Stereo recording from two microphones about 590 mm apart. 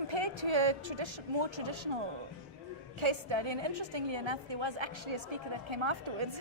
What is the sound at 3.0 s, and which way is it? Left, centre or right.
A woman's voice, right.